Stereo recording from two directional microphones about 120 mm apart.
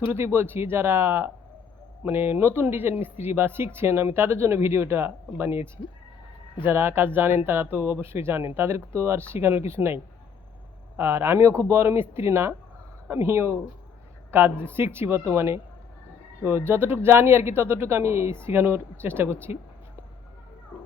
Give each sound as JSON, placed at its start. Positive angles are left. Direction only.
{"t": 0.1, "sound": "speech", "side_deg": -20}